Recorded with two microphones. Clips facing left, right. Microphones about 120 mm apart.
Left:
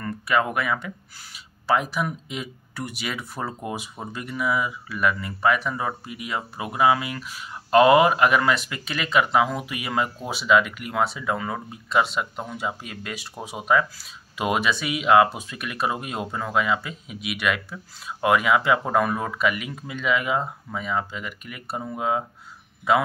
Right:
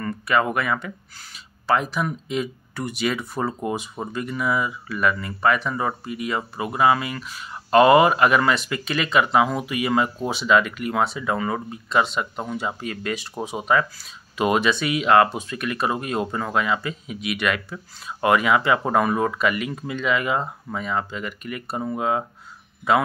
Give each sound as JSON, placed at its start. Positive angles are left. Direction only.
{"t": 0.0, "sound": "speech", "side_deg": 0}